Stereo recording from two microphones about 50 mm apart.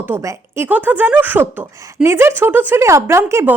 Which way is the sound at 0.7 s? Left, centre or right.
Right.